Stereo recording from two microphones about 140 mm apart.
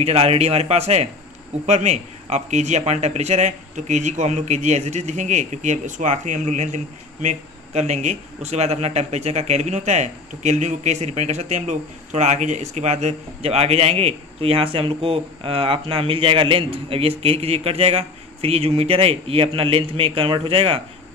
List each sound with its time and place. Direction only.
0.0 s a man's voice: 45° right (ahead or behind)